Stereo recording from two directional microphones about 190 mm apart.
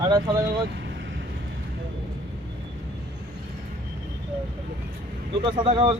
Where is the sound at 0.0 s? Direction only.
20° right (ahead or behind).